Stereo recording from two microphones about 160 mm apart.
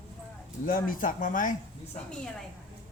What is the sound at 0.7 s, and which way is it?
Speech, 60° left (ahead or behind).